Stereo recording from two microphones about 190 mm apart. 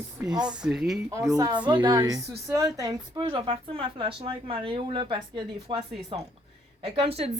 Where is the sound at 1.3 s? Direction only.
20° right (ahead or behind).